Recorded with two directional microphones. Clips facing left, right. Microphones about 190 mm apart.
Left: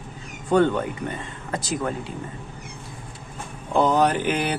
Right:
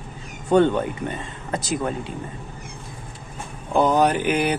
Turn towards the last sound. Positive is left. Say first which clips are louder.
# right 2 dB
turn(degrees=-10)  # may be behind; listen again after turning